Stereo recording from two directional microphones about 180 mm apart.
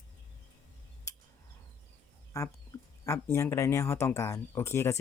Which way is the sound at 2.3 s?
15° left (ahead or behind).